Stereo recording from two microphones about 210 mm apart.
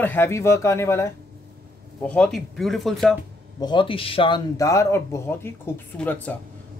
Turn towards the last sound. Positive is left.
turn(degrees=10)  # may be behind; listen again after turning